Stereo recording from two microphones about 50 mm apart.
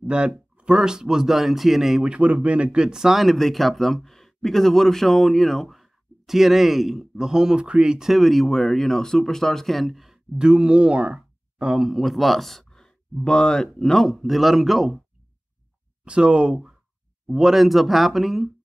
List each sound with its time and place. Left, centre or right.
0.0 s speech: right
2.0 s speech: right
3.3 s a man's voice: centre
8.1 s a man's voice: centre
10.3 s speech: centre
11.8 s a man's voice: centre
16.1 s speech: centre
17.3 s a man's voice: centre